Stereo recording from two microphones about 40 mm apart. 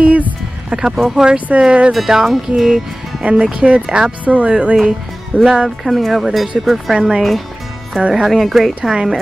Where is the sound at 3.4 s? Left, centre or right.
Right.